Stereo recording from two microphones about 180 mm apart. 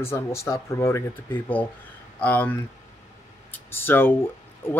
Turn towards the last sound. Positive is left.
turn(degrees=15)  # may be behind; listen again after turning